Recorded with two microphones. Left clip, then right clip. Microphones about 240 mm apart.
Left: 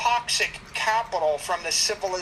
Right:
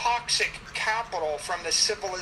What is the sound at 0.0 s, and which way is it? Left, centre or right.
A woman's voice, left.